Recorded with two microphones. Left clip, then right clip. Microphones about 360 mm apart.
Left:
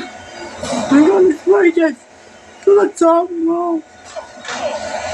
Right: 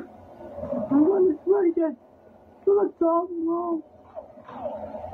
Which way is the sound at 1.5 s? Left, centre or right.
Right.